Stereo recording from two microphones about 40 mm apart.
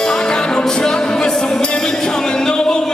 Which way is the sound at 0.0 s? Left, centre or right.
Centre.